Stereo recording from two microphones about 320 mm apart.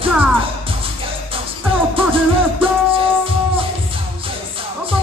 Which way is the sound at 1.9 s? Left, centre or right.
Centre.